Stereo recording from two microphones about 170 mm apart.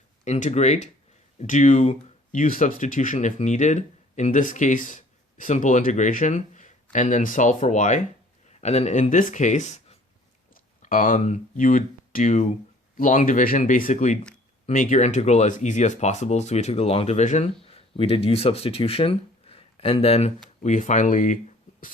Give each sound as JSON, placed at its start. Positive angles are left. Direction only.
{"t": 0.3, "sound": "speech", "side_deg": 45}
{"t": 10.5, "sound": "speech", "side_deg": 55}